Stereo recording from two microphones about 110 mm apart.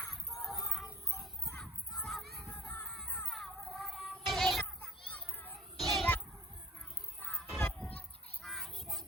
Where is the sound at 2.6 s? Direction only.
5° left (ahead or behind).